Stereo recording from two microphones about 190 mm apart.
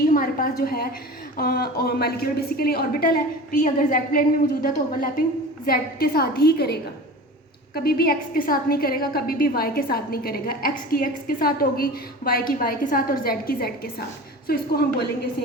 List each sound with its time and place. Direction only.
0.0 s a sound: 45° left (ahead or behind)
1.4 s a woman's voice: 55° left (ahead or behind)
3.5 s a woman's voice: 40° left (ahead or behind)
7.9 s a woman's voice: 50° left (ahead or behind)